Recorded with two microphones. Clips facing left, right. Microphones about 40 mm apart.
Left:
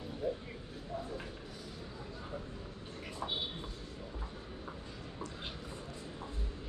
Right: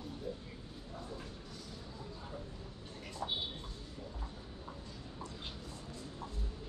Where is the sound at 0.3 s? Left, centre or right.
Centre.